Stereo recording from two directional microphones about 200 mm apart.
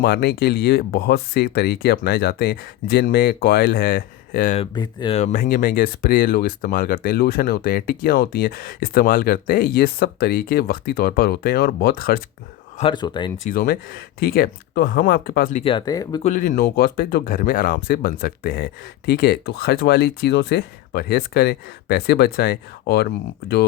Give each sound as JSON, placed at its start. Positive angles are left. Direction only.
{"t": 0.0, "sound": "speech", "side_deg": 55}
{"t": 4.5, "sound": "speech", "side_deg": 25}
{"t": 5.1, "sound": "speech", "side_deg": 40}
{"t": 12.8, "sound": "speech", "side_deg": 25}
{"t": 13.4, "sound": "speech", "side_deg": 45}
{"t": 15.6, "sound": "speech", "side_deg": 20}
{"t": 16.2, "sound": "speech", "side_deg": 40}